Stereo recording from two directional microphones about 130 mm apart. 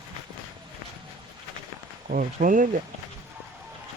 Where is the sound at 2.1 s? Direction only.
90° right.